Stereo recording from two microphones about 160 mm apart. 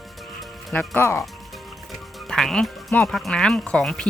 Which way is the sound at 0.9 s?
15° left (ahead or behind).